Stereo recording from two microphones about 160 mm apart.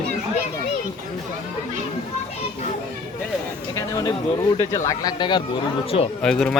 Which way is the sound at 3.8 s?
20° left (ahead or behind).